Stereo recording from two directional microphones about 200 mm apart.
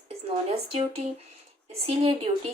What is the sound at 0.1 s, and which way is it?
Speech, 30° right (ahead or behind).